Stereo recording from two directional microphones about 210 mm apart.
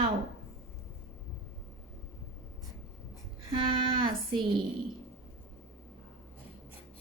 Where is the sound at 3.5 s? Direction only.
25° right (ahead or behind).